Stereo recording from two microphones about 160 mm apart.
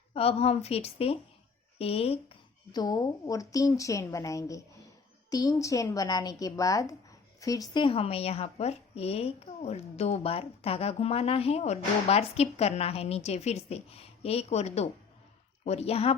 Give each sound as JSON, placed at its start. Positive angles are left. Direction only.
{"t": 0.1, "sound": "a woman's voice", "side_deg": 40}
{"t": 2.7, "sound": "a woman's voice", "side_deg": 25}